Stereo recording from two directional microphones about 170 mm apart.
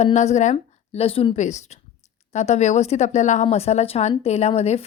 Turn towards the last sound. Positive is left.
turn(degrees=35)  # may be behind; listen again after turning